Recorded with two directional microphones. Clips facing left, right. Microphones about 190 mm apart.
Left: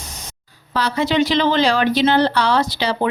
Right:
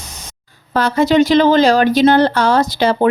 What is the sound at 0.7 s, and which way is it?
Speech, 50° right (ahead or behind).